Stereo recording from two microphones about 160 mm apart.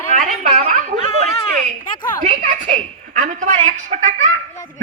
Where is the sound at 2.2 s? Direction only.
50° right (ahead or behind).